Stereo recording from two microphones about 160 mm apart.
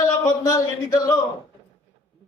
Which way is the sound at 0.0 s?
20° left (ahead or behind).